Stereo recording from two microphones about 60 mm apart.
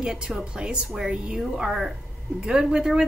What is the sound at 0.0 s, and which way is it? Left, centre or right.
Speech, centre.